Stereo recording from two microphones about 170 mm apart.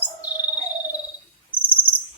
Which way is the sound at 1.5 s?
30° left (ahead or behind).